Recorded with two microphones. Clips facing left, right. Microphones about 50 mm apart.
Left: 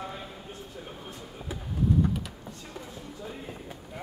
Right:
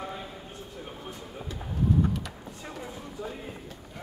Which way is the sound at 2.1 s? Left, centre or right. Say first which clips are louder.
Even; centre.